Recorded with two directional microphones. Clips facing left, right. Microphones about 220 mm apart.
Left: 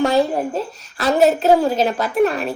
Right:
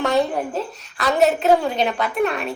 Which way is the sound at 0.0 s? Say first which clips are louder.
Left 3 dB; centre (ahead or behind).